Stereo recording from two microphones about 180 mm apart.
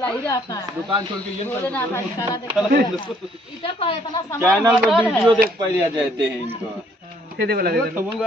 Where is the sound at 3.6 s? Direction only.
30° left (ahead or behind).